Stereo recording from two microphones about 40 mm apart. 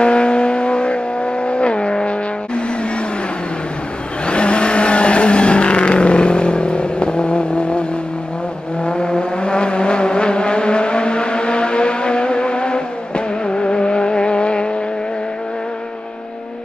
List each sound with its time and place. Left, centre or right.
0.0 s vehicle: left
4.3 s vehicle: left
8.8 s vehicle: left